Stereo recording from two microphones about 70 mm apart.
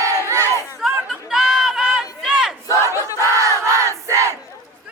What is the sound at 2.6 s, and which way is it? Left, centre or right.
Battle cry, left.